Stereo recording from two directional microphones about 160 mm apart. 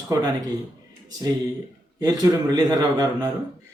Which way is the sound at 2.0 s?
25° right (ahead or behind).